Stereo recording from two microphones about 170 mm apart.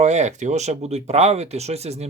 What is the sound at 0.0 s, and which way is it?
Speech, 40° right (ahead or behind).